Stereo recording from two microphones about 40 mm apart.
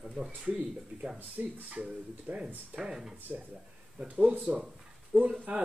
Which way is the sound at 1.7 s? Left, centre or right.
Right.